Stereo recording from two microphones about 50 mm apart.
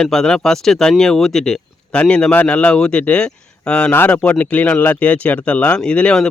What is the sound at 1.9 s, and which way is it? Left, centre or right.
Speech, left.